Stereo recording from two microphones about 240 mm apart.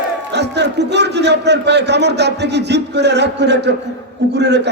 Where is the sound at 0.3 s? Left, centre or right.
Right.